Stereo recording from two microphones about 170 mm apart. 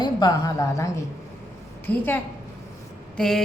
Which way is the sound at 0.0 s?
25° left (ahead or behind).